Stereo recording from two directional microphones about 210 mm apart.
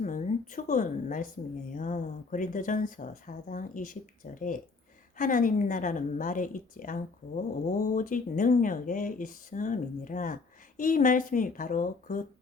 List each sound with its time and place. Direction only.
0.0 s a woman's voice: 35° left (ahead or behind)